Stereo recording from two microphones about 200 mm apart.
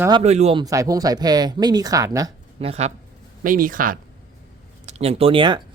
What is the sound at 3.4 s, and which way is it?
Speech, 40° right (ahead or behind).